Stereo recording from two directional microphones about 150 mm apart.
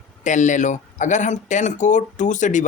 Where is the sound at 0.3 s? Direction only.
55° left (ahead or behind).